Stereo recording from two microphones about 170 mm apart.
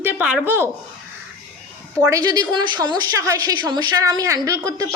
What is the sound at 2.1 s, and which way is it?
Speech, 20° right (ahead or behind).